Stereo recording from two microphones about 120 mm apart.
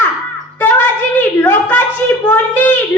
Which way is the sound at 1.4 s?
15° left (ahead or behind).